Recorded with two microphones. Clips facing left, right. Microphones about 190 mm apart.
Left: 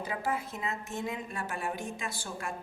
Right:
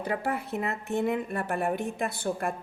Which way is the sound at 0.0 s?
60° right (ahead or behind).